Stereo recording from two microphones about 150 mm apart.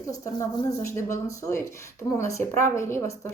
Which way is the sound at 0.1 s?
20° left (ahead or behind).